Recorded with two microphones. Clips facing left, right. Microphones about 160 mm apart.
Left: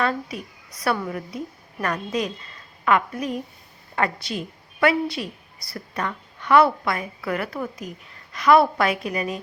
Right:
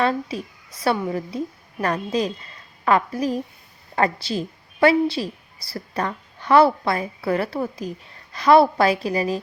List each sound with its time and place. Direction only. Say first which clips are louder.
0.0 s a woman's voice: right 3 dB; 30° right (ahead or behind)